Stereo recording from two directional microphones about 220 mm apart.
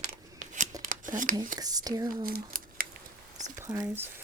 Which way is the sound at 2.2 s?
40° right (ahead or behind).